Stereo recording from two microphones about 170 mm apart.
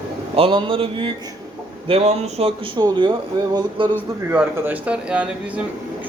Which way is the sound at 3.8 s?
30° right (ahead or behind).